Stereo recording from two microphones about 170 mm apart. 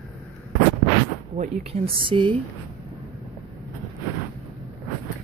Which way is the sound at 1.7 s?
30° right (ahead or behind).